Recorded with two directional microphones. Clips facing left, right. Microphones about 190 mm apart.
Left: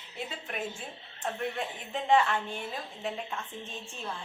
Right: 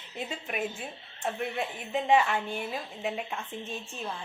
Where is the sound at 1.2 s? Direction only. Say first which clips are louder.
Right 2 dB; 10° right (ahead or behind).